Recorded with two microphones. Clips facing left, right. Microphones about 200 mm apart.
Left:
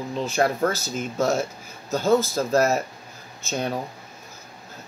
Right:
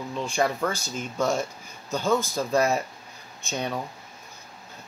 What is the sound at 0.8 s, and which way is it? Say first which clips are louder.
Speech: left 3 dB; 5° left (ahead or behind).